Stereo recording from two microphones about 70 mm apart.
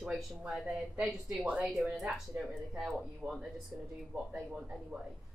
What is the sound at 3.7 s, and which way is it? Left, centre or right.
Speech, right.